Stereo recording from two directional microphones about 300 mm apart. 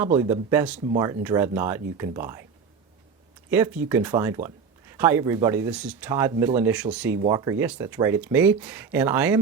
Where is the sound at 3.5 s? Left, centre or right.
Centre.